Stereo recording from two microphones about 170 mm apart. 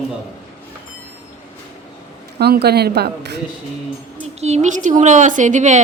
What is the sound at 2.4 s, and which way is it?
A woman's voice, 70° right (ahead or behind).